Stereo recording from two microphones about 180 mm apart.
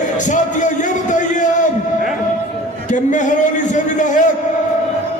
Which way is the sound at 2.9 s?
45° left (ahead or behind).